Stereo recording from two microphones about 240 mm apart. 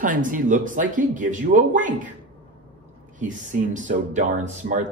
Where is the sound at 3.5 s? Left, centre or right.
Right.